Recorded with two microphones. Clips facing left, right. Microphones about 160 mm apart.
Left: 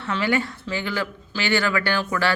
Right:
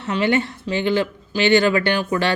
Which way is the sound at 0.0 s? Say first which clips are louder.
Right 4 dB; 20° right (ahead or behind).